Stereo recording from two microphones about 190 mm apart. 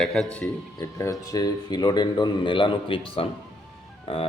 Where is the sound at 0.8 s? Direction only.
15° left (ahead or behind).